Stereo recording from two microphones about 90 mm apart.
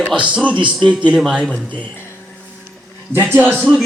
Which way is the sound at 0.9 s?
15° right (ahead or behind).